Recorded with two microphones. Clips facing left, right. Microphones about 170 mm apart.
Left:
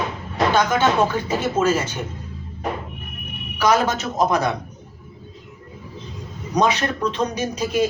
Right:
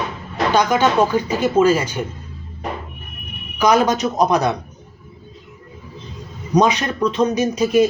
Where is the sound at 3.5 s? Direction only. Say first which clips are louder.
Right 3 dB; 15° right (ahead or behind).